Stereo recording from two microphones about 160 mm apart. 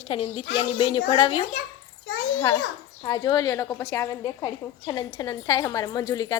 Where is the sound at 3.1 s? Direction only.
25° left (ahead or behind).